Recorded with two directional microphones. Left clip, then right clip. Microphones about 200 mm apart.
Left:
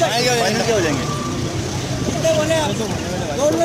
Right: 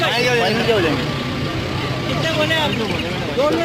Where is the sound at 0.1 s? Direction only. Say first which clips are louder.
Right 1 dB; 45° left (ahead or behind).